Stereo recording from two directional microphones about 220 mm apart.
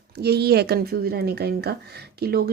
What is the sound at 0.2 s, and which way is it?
Speech, 45° right (ahead or behind).